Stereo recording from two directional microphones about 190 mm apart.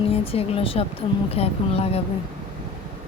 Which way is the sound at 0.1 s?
30° left (ahead or behind).